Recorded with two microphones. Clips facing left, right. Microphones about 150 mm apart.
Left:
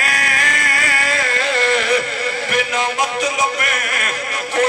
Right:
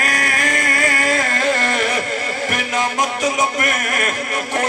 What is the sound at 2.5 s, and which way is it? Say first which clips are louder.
Music: left 2 dB; 45° right (ahead or behind).